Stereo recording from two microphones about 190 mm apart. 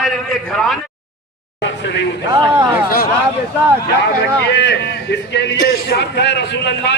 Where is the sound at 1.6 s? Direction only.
65° left (ahead or behind).